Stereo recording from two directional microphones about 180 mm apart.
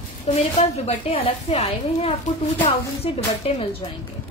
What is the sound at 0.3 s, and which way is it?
A woman's voice, 35° left (ahead or behind).